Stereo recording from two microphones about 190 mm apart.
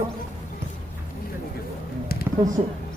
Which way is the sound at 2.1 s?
55° left (ahead or behind).